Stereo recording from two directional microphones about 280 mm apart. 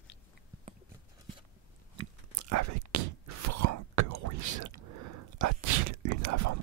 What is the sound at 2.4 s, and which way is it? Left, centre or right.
Whispering, right.